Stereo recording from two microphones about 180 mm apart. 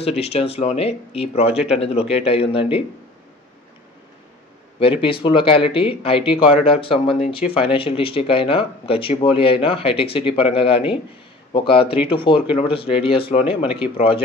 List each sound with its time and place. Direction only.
0.2 s speech: 35° left (ahead or behind)
4.7 s speech: 30° left (ahead or behind)